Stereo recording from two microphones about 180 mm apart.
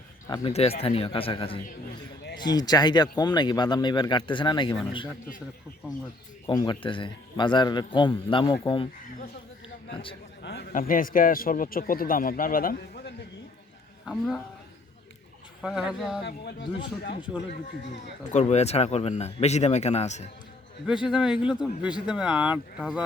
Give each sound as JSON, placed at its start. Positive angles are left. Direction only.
{"t": 0.3, "sound": "speech", "side_deg": 25}
{"t": 6.4, "sound": "speech", "side_deg": 20}
{"t": 9.9, "sound": "speech", "side_deg": 30}
{"t": 10.7, "sound": "a man's voice", "side_deg": 50}
{"t": 14.0, "sound": "a woman's voice", "side_deg": 0}
{"t": 15.6, "sound": "speech", "side_deg": -5}
{"t": 16.2, "sound": "speech", "side_deg": 70}
{"t": 18.3, "sound": "speech", "side_deg": 40}
{"t": 21.1, "sound": "speech", "side_deg": -5}